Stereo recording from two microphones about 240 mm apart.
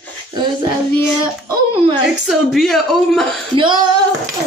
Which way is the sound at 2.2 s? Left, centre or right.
Centre.